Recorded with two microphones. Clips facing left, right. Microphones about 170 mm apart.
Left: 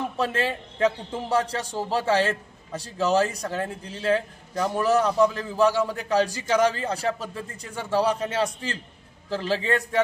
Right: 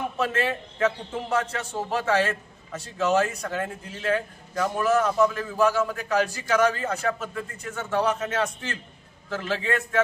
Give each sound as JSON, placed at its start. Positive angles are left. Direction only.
{"t": 0.2, "sound": "a man's voice", "side_deg": 30}